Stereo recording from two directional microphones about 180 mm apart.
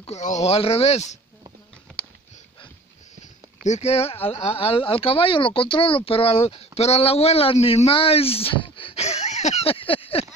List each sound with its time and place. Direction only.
0.0 s speech: 40° left (ahead or behind)
3.6 s speech: 40° left (ahead or behind)